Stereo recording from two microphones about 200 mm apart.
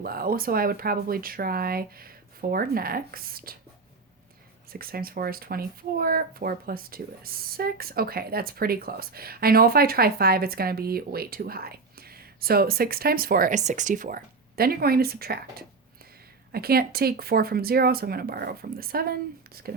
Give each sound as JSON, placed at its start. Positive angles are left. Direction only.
{"t": 0.0, "sound": "speech", "side_deg": -50}
{"t": 4.7, "sound": "speech", "side_deg": -50}